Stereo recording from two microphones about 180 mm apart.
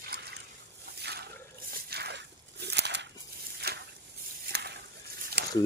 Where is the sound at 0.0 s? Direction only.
60° right (ahead or behind).